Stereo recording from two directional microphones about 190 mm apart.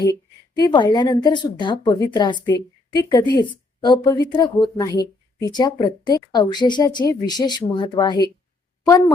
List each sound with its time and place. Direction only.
0.5 s a woman's voice: 20° left (ahead or behind)